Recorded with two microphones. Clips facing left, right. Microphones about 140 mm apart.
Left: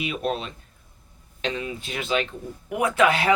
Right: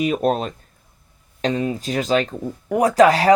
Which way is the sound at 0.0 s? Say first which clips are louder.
Right 8 dB; 45° right (ahead or behind).